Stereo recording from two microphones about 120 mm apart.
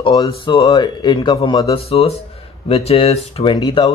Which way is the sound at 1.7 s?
55° left (ahead or behind).